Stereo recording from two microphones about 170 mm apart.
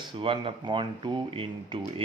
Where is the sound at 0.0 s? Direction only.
30° right (ahead or behind).